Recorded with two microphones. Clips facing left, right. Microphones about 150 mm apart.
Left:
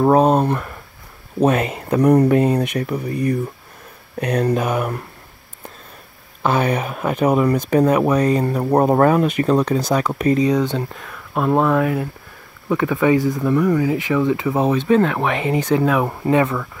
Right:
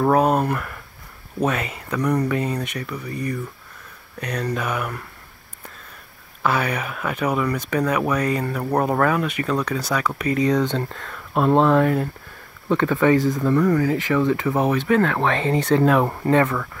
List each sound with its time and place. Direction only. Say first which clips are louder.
0.0 s speech: left 4 dB; 25° left (ahead or behind)
1.5 s speech: left 7 dB; 50° left (ahead or behind)
4.6 s speech: left 5 dB; 35° left (ahead or behind)
6.4 s speech: left 4 dB; 30° left (ahead or behind)
8.0 s speech: left 5 dB; 25° left (ahead or behind)
9.6 s speech: left 5 dB; 25° left (ahead or behind)
11.3 s speech: even; centre (ahead or behind)
15.6 s speech: right 1 dB; 5° left (ahead or behind)